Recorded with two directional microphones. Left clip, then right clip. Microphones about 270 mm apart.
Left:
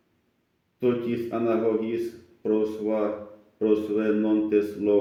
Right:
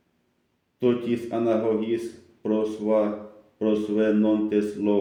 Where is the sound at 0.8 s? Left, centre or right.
Right.